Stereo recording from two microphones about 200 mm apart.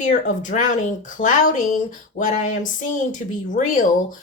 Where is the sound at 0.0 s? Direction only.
40° left (ahead or behind).